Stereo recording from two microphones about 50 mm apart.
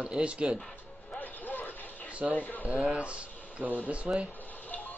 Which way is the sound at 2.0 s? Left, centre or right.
Right.